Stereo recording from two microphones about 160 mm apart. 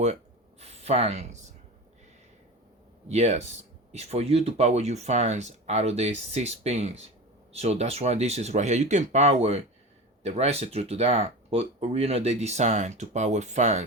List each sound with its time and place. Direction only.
0.6 s speech: 40° right (ahead or behind)
3.1 s speech: 45° right (ahead or behind)